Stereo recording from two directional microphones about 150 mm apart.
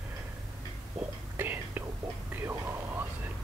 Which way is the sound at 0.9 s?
15° right (ahead or behind).